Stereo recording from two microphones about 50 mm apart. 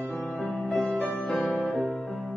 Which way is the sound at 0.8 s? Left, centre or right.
Left.